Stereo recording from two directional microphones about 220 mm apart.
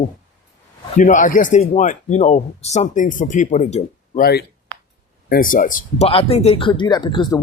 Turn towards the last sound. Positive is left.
turn(degrees=20)  # may be behind; listen again after turning